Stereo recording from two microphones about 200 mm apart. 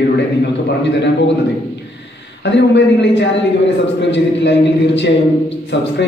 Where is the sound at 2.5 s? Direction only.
60° left (ahead or behind).